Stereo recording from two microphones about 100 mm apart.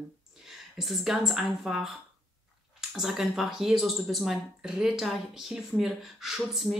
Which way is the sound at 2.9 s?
Centre (ahead or behind).